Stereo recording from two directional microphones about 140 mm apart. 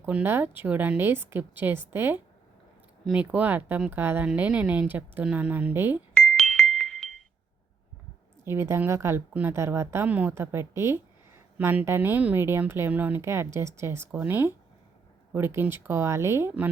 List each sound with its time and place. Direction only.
0.0 s speech: 10° right (ahead or behind)
6.1 s music: 5° left (ahead or behind)
8.4 s speech: 20° right (ahead or behind)